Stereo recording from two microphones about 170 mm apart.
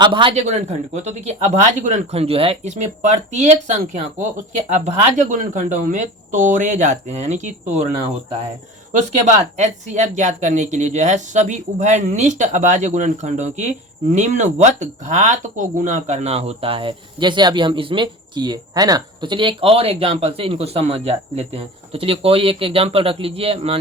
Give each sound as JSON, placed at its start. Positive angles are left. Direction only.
{"t": 0.0, "sound": "speech", "side_deg": -30}
{"t": 9.6, "sound": "speech", "side_deg": -45}